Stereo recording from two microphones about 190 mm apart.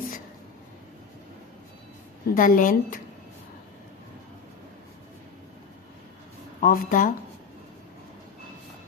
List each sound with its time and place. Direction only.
2.2 s a woman's voice: 45° left (ahead or behind)
6.6 s a woman's voice: 45° left (ahead or behind)